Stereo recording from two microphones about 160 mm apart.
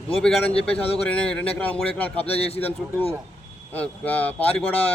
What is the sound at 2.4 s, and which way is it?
Speech, 40° left (ahead or behind).